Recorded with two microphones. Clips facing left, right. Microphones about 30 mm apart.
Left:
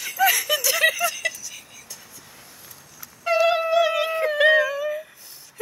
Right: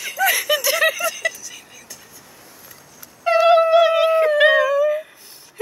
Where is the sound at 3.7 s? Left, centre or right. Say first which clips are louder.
Right 6 dB; right.